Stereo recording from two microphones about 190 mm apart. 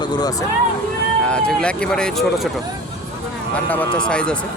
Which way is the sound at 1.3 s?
5° left (ahead or behind).